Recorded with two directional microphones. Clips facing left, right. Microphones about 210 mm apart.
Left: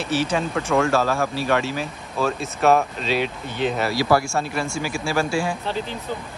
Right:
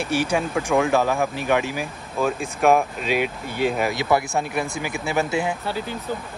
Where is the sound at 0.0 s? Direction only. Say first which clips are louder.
Even; 10° right (ahead or behind).